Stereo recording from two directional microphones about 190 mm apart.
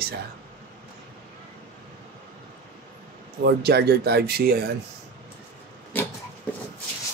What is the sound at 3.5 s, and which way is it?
Speech, 60° right (ahead or behind).